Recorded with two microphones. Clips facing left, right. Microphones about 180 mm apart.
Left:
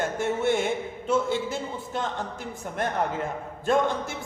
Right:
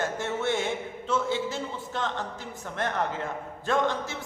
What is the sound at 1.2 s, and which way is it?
Speech, 50° left (ahead or behind).